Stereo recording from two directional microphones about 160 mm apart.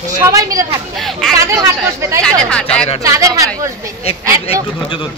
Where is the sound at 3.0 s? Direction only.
20° right (ahead or behind).